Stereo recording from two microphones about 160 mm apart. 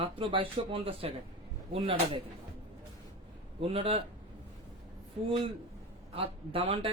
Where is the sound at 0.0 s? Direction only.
30° right (ahead or behind).